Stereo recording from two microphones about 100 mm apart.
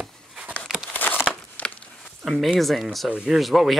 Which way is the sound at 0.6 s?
5° right (ahead or behind).